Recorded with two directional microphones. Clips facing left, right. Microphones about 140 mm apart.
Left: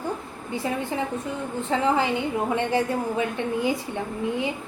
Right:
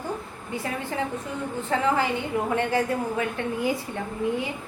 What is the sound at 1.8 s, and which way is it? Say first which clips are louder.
A woman's voice: left 2 dB; 20° left (ahead or behind).